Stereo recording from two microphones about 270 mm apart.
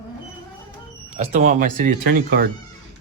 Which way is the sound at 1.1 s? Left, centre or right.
Right.